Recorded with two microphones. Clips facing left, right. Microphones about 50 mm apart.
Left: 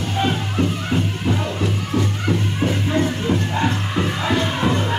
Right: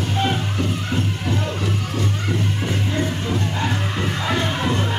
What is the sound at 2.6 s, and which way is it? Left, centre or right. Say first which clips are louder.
Music: left 4 dB; centre.